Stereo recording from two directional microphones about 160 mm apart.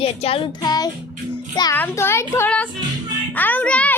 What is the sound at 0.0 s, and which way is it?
Music, 35° left (ahead or behind).